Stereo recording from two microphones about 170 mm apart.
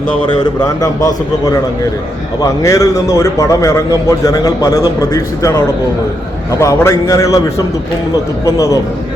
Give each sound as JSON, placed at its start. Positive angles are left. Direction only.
{"t": 0.6, "sound": "a man's voice", "side_deg": 20}
{"t": 8.4, "sound": "a man's voice", "side_deg": 20}